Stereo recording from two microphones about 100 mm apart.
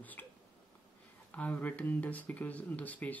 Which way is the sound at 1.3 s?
15° left (ahead or behind).